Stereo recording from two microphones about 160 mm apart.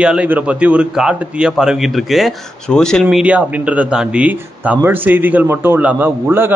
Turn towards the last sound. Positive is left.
turn(degrees=-15)  # may be behind; listen again after turning